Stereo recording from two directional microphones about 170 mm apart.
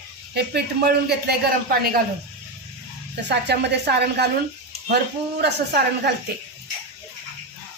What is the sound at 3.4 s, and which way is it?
Speech, 75° right (ahead or behind).